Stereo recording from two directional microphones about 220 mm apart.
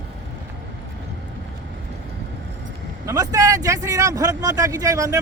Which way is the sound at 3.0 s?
15° right (ahead or behind).